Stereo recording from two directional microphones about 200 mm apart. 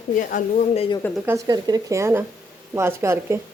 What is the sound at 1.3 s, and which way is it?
A woman's voice, 20° right (ahead or behind).